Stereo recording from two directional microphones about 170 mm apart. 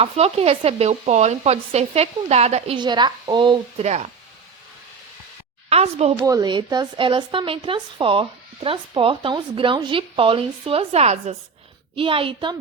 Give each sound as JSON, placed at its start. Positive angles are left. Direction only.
{"t": 0.0, "sound": "a woman's voice", "side_deg": -35}
{"t": 3.8, "sound": "a woman's voice", "side_deg": -40}
{"t": 5.6, "sound": "a woman's voice", "side_deg": -40}
{"t": 6.2, "sound": "a woman's voice", "side_deg": -25}